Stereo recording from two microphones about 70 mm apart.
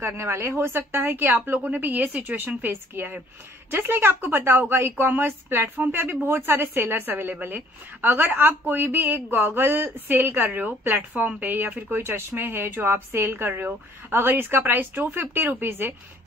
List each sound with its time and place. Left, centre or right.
0.0 s a woman's voice: right